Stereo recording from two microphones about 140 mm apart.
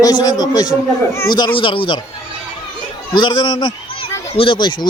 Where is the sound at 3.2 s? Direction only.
30° left (ahead or behind).